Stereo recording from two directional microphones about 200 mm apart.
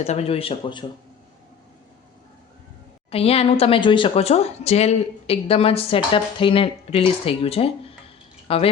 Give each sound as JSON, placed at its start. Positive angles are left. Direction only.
{"t": 0.0, "sound": "a woman's voice", "side_deg": 30}
{"t": 3.1, "sound": "a woman's voice", "side_deg": 30}